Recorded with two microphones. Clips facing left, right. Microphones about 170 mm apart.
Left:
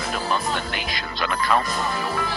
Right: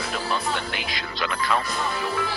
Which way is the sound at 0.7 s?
45° left (ahead or behind).